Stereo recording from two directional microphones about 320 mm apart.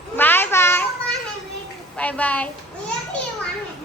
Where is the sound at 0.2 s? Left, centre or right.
Centre.